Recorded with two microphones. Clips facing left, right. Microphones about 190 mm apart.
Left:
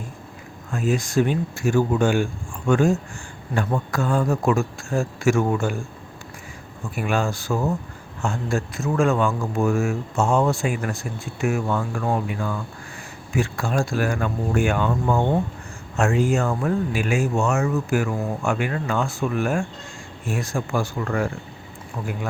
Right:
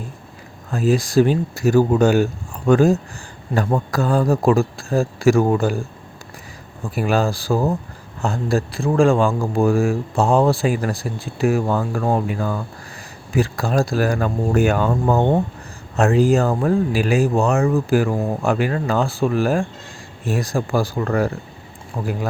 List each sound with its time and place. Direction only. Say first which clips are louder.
0.7 s speech: right 5 dB; 35° right (ahead or behind)
6.9 s speech: right 5 dB; 35° right (ahead or behind)